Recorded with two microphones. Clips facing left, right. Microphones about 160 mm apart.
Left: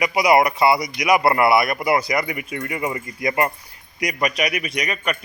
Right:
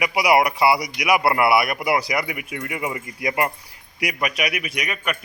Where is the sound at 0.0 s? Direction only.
10° right (ahead or behind).